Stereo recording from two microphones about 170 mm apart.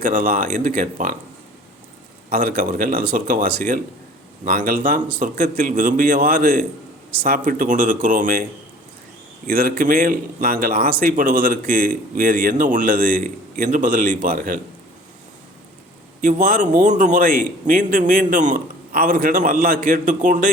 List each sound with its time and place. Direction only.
0.0 s a man's voice: 50° right (ahead or behind)
2.3 s a man's voice: 55° right (ahead or behind)
9.5 s speech: 60° right (ahead or behind)
16.2 s a man's voice: 55° right (ahead or behind)